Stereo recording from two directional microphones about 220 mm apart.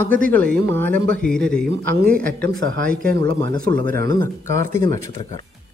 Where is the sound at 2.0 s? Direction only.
40° right (ahead or behind).